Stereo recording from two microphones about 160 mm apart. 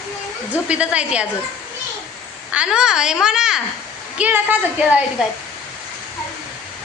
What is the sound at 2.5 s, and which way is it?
A woman's voice, 5° right (ahead or behind).